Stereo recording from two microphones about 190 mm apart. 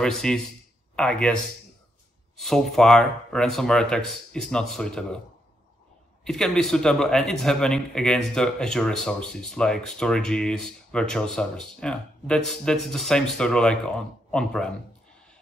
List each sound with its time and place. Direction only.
0.0 s speech: 5° left (ahead or behind)
2.3 s speech: centre (ahead or behind)
6.2 s speech: centre (ahead or behind)